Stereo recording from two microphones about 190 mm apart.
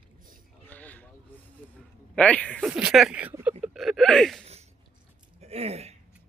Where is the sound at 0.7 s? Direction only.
10° left (ahead or behind).